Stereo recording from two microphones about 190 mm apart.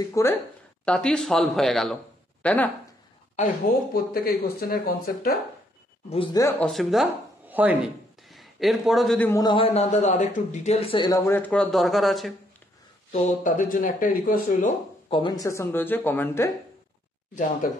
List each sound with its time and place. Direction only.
0.1 s speech: 15° left (ahead or behind)
3.6 s speech: 50° left (ahead or behind)
6.0 s a man's voice: 25° left (ahead or behind)
6.4 s speech: 5° left (ahead or behind)
9.3 s a man's voice: 20° left (ahead or behind); by 12.4 s centre (ahead or behind)
13.1 s speech: 40° left (ahead or behind)
15.0 s speech: 25° left (ahead or behind)